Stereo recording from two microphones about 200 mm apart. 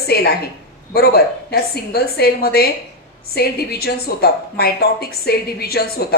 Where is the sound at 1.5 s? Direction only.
50° left (ahead or behind).